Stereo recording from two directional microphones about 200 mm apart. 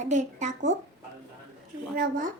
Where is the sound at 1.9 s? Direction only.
40° right (ahead or behind).